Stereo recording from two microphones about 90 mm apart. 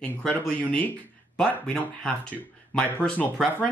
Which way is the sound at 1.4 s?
15° left (ahead or behind).